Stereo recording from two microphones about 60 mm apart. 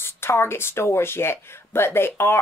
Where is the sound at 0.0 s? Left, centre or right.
Left.